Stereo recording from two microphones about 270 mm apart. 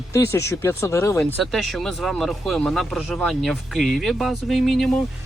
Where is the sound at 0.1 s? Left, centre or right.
Centre.